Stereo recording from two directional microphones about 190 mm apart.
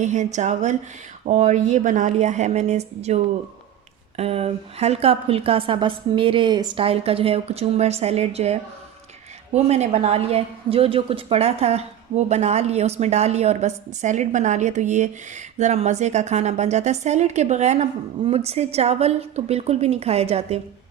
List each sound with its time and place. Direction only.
0.0 s a woman's voice: 40° right (ahead or behind)
4.2 s a woman's voice: 30° right (ahead or behind)